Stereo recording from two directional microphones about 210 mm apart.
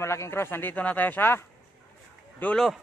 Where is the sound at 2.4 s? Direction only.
Centre (ahead or behind).